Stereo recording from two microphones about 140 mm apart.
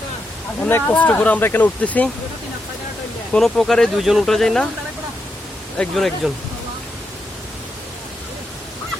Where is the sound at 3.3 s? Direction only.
5° left (ahead or behind).